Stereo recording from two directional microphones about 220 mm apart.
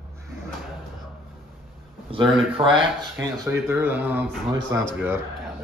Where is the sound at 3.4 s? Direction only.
10° right (ahead or behind).